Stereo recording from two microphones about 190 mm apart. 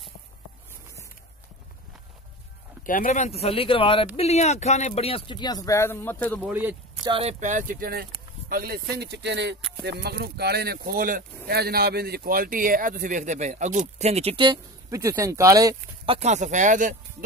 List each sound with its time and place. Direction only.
2.9 s speech: 45° left (ahead or behind); by 6.4 s 10° left (ahead or behind)
6.4 s speech: 10° right (ahead or behind)
7.1 s speech: 30° right (ahead or behind); by 9.6 s 65° right (ahead or behind)
9.6 s a sound: centre (ahead or behind)
9.8 s speech: 55° right (ahead or behind); by 15.7 s 15° right (ahead or behind)
16.1 s speech: 35° right (ahead or behind)